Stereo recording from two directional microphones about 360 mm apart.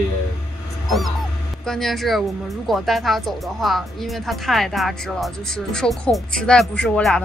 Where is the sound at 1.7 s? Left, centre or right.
Centre.